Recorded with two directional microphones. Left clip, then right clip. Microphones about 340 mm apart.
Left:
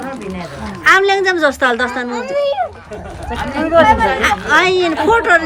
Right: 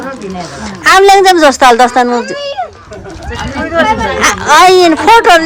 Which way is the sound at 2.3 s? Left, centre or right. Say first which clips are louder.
Left 3 dB; left.